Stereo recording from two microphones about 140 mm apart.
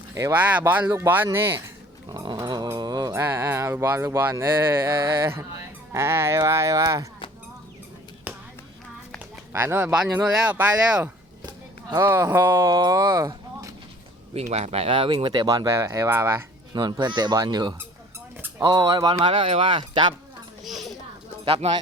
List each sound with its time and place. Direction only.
0.1 s speech: 20° right (ahead or behind)
2.0 s speech: 35° right (ahead or behind)
9.5 s speech: 15° right (ahead or behind)
14.3 s speech: 50° right (ahead or behind); by 16.4 s 15° right (ahead or behind)
16.7 s speech: 30° right (ahead or behind)
20.7 s a sound: centre (ahead or behind)
21.4 s speech: 40° right (ahead or behind)